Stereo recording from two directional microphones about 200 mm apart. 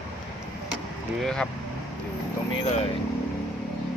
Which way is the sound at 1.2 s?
5° left (ahead or behind).